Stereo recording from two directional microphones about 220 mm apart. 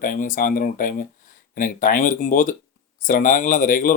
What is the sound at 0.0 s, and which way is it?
Speech, 40° left (ahead or behind).